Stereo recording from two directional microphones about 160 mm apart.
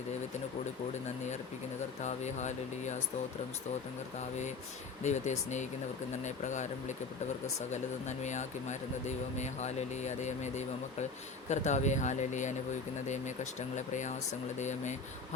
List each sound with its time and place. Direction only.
2.0 s speech: 45° left (ahead or behind)
5.0 s speech: 45° left (ahead or behind)